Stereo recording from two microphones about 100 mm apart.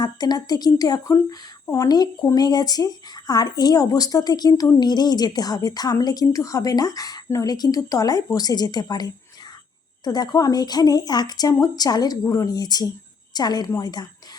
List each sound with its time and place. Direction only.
0.0 s a woman's voice: 40° left (ahead or behind)